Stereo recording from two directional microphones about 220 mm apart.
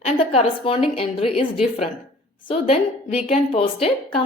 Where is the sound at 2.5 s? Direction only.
25° left (ahead or behind).